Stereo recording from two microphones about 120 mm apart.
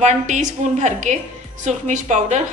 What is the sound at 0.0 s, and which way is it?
A woman's voice, 85° right.